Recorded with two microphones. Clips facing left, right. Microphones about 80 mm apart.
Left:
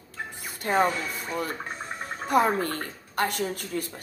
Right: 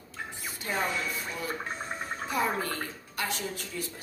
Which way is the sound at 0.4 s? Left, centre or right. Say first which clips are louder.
Left 9 dB; left.